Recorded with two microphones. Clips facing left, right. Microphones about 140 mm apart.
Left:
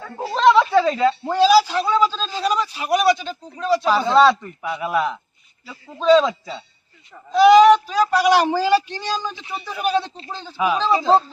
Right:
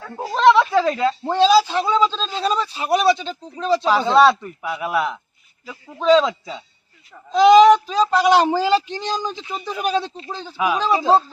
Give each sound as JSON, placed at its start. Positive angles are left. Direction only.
{"t": 0.3, "sound": "a sound", "side_deg": 0}
{"t": 1.3, "sound": "a man's voice", "side_deg": -25}
{"t": 2.0, "sound": "speech", "side_deg": 5}
{"t": 2.4, "sound": "speech", "side_deg": -30}
{"t": 4.0, "sound": "a man's voice", "side_deg": -5}
{"t": 6.4, "sound": "a man's voice", "side_deg": -10}